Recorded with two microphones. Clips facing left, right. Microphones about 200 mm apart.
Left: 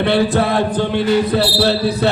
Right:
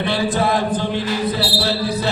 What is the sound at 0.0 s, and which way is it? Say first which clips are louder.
Chant: left 4 dB; 60° left (ahead or behind).